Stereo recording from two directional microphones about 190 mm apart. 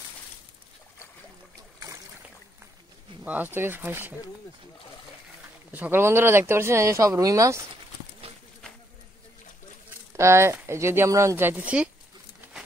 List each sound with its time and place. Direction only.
3.3 s speech: 10° right (ahead or behind)
5.7 s speech: 10° right (ahead or behind)
10.1 s speech: 15° right (ahead or behind)